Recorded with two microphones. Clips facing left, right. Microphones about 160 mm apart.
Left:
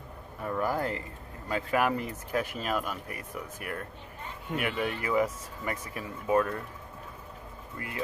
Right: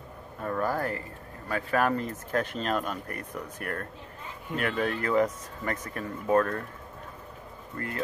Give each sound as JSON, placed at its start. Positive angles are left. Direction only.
{"t": 0.4, "sound": "speech", "side_deg": 15}
{"t": 7.7, "sound": "speech", "side_deg": 10}